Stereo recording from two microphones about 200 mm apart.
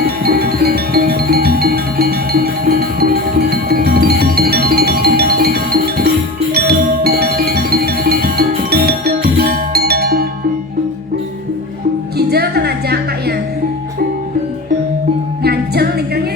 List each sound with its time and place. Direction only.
0.3 s music: 50° right (ahead or behind)
12.1 s music: 55° right (ahead or behind)
15.4 s music: 55° right (ahead or behind)